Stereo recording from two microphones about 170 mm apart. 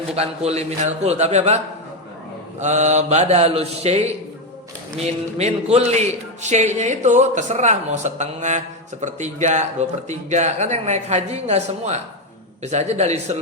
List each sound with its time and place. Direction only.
0.2 s a man's voice: 40° right (ahead or behind)